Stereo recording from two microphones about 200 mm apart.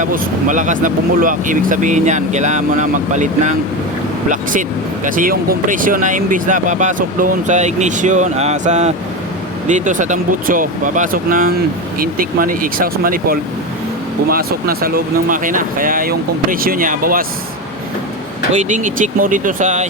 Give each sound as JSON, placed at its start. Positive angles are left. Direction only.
{"t": 0.0, "sound": "speech", "side_deg": -40}
{"t": 5.0, "sound": "speech", "side_deg": -45}
{"t": 18.5, "sound": "speech", "side_deg": -40}